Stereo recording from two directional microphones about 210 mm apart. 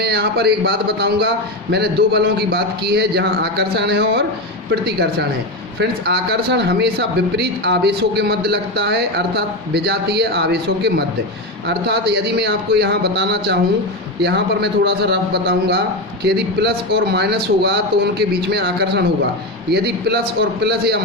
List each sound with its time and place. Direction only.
0.0 s a man's voice: 50° right (ahead or behind)